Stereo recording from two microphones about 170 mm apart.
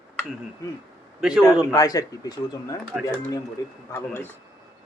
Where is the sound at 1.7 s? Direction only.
20° left (ahead or behind).